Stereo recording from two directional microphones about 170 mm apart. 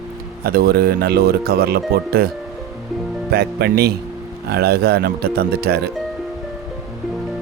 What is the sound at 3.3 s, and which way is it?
Speech, 70° right (ahead or behind).